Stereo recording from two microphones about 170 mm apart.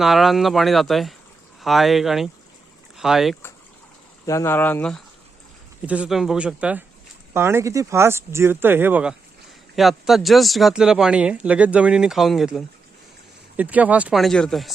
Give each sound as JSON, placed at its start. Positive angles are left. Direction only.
{"t": 0.0, "sound": "speech", "side_deg": 0}
{"t": 4.3, "sound": "speech", "side_deg": 15}
{"t": 5.8, "sound": "speech", "side_deg": -10}